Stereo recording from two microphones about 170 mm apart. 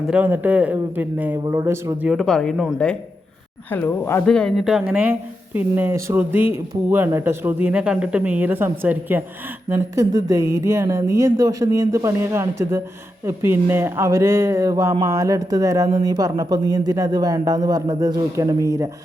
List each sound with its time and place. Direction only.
0.1 s speech: 10° right (ahead or behind)
2.0 s speech: centre (ahead or behind); by 18.9 s 20° right (ahead or behind)